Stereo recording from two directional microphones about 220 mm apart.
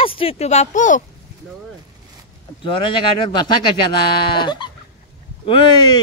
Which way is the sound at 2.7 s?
20° left (ahead or behind).